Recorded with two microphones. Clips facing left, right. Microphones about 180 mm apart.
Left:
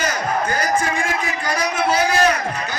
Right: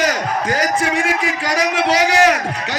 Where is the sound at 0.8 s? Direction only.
80° right.